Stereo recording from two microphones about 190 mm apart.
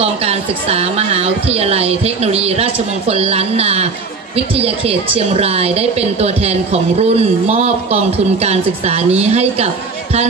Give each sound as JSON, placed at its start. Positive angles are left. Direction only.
{"t": 0.0, "sound": "a woman's voice", "side_deg": -35}